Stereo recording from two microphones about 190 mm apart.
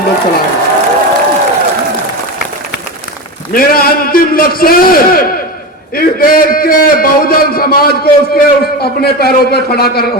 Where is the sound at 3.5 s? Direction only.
50° left (ahead or behind).